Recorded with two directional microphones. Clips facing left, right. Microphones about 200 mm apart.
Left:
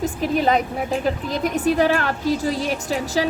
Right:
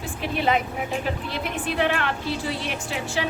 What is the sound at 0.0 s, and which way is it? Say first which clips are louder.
A woman's voice: left 6 dB; 40° left (ahead or behind).